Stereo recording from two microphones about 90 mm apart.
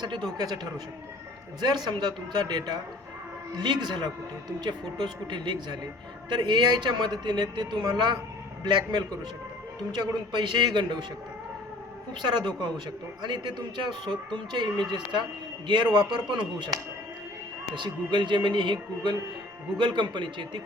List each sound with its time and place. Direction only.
0.0 s speech: 55° right (ahead or behind)
12.2 s speech: 55° right (ahead or behind)
17.7 s speech: 60° right (ahead or behind)